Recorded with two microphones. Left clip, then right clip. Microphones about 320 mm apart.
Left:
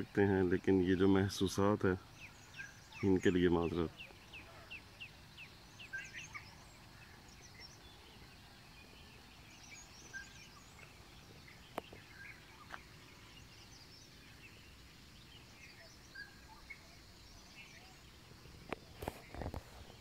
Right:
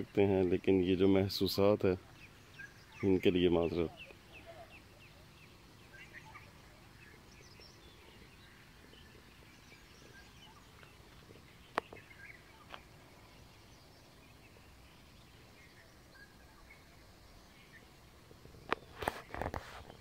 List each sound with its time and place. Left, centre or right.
0.1 s speech: centre
3.0 s speech: centre
18.7 s walk: right